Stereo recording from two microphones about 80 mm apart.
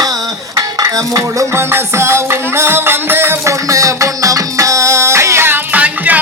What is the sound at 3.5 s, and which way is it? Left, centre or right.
Music, right.